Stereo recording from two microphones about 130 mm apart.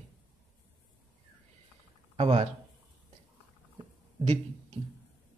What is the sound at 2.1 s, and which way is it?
Speech, 50° right (ahead or behind).